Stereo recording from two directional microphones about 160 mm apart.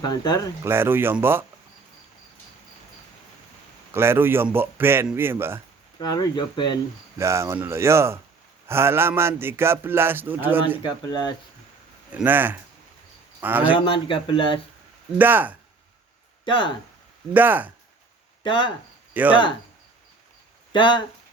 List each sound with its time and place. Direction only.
0.0 s speech: 25° left (ahead or behind)
0.6 s a man's voice: 15° right (ahead or behind)
3.9 s a man's voice: 15° right (ahead or behind)
6.0 s speech: 25° left (ahead or behind)
7.2 s a man's voice: 15° right (ahead or behind)
10.8 s speech: 25° left (ahead or behind)
12.1 s a man's voice: 10° right (ahead or behind)
13.7 s speech: 30° left (ahead or behind)
15.2 s a man's voice: 10° right (ahead or behind)
16.4 s speech: 30° left (ahead or behind)
17.3 s a man's voice: 10° right (ahead or behind)
18.4 s speech: 30° left (ahead or behind)
19.1 s speech: 10° right (ahead or behind)
20.7 s speech: 30° left (ahead or behind)